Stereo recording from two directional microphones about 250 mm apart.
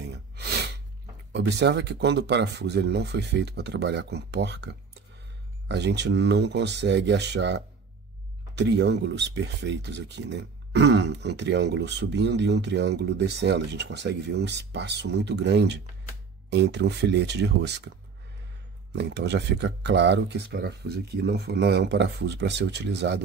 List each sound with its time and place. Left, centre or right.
0.0 s sneeze: right
1.3 s speech: right
18.9 s speech: right